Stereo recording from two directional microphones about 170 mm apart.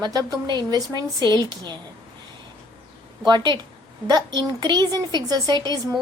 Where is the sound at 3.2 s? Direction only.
25° right (ahead or behind).